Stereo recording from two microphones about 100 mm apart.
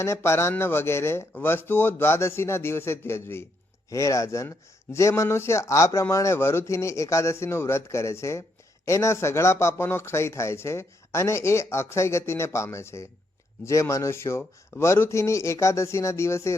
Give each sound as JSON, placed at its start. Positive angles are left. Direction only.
{"t": 0.0, "sound": "speech", "side_deg": 25}